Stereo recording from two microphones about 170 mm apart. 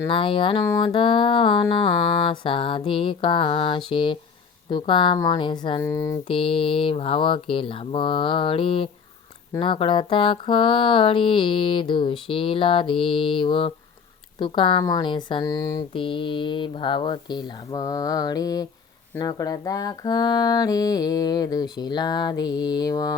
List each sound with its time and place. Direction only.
0.1 s speech: 30° left (ahead or behind)
5.8 s mantra: 15° left (ahead or behind)
6.2 s speech: 30° left (ahead or behind)